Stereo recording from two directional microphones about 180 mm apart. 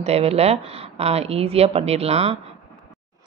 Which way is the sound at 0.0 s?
35° right (ahead or behind).